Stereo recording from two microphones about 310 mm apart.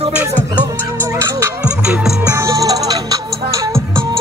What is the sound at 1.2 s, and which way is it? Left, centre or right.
Music, centre.